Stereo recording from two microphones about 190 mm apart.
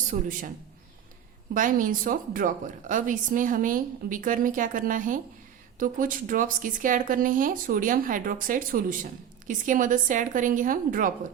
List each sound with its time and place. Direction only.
0.1 s a woman's voice: 45° right (ahead or behind)
1.5 s a woman's voice: 45° right (ahead or behind)